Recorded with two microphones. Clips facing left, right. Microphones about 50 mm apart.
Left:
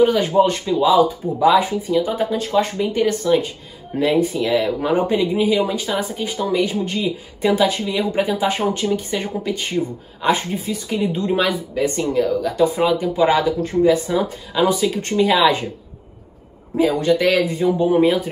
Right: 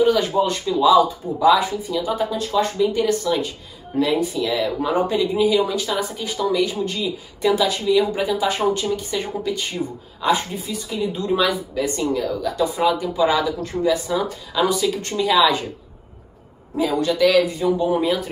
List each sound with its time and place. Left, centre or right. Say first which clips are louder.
0.0 s speech: left 3 dB; left
16.7 s speech: left 4 dB; left